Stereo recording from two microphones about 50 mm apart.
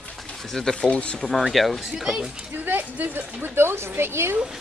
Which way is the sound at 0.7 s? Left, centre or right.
Centre.